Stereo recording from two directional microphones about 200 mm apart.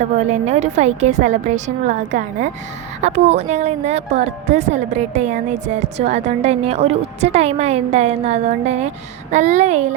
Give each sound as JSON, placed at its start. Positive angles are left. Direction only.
{"t": 0.0, "sound": "speech", "side_deg": -35}